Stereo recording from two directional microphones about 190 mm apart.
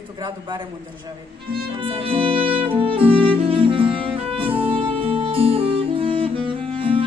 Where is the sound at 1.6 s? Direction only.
25° right (ahead or behind).